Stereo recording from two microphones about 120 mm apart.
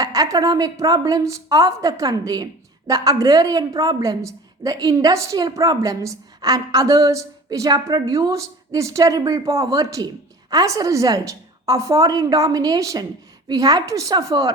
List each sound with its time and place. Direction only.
0.0 s a woman's voice: 30° right (ahead or behind)